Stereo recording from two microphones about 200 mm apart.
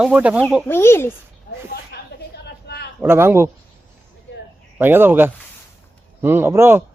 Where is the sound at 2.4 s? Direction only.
55° left (ahead or behind).